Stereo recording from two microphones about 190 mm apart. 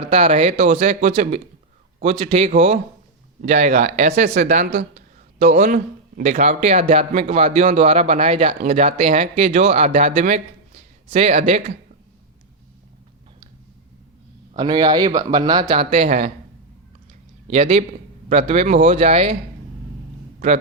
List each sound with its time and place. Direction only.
0.0 s speech: 35° right (ahead or behind)
14.5 s speech: 20° right (ahead or behind); by 16.3 s 40° right (ahead or behind)
17.5 s speech: 35° right (ahead or behind)